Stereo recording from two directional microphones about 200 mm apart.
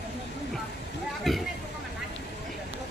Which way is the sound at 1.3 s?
Centre (ahead or behind).